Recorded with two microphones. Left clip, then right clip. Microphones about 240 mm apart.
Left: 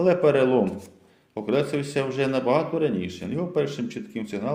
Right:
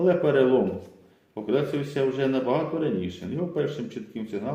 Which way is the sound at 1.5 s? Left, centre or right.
Left.